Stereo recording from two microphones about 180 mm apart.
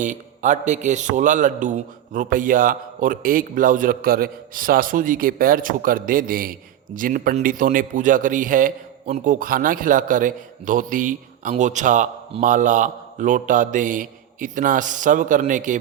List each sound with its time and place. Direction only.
0.0 s a man's voice: 45° right (ahead or behind)